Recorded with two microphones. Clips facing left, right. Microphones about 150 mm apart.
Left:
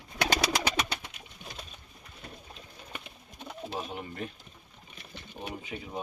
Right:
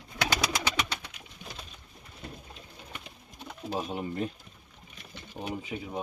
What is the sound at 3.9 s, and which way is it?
Speech, 30° right (ahead or behind).